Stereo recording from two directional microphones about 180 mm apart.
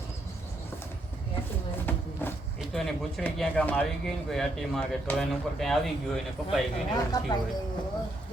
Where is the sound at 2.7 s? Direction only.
Centre (ahead or behind).